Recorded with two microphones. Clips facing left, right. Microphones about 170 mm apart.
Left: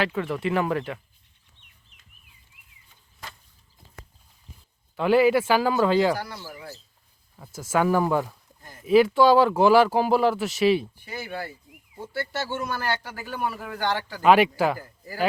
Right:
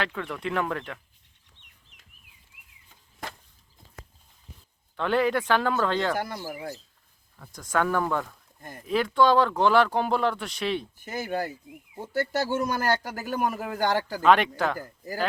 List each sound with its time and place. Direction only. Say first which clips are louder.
0.0 s speech: left 5 dB; 5° left (ahead or behind)
1.9 s a sound: right 2 dB; 90° right
4.9 s speech: left 5 dB; 5° left (ahead or behind)
6.1 s a man's voice: right 3 dB; 50° right (ahead or behind)
6.4 s speech: right 5 dB; 20° right (ahead or behind)
7.5 s speech: left 4 dB; 5° left (ahead or behind)
10.9 s a man's voice: right 4 dB; 45° right (ahead or behind)
14.2 s speech: left 4 dB; 5° left (ahead or behind)
14.8 s a man's voice: right 4 dB; 40° right (ahead or behind)